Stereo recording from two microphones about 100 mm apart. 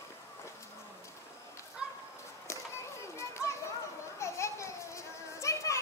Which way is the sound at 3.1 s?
30° left (ahead or behind).